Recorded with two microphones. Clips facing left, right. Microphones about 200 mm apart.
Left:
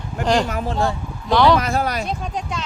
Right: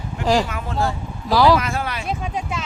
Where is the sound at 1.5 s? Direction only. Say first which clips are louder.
Left 3 dB; 40° left (ahead or behind).